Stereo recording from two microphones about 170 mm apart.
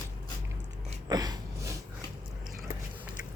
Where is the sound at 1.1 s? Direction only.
25° right (ahead or behind).